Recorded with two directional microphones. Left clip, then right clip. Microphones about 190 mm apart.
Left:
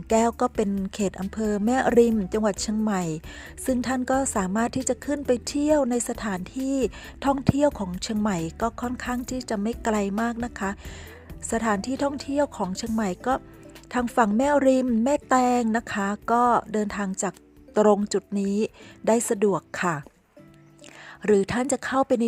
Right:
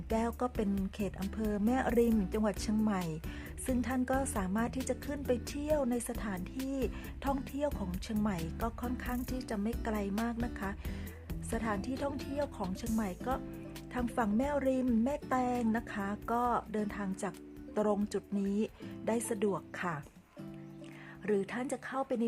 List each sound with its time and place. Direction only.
0.1 s a woman's voice: 40° left (ahead or behind)
21.2 s a woman's voice: 40° left (ahead or behind)